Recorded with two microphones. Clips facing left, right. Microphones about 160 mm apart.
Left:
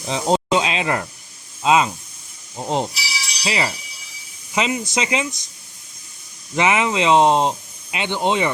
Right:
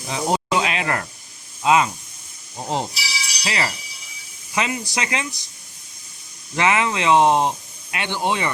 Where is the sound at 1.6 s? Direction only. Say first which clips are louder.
Left 1 dB; 20° left (ahead or behind).